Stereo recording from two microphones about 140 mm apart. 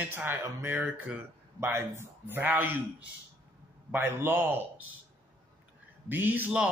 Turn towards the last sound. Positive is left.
turn(degrees=-10)  # may be behind; listen again after turning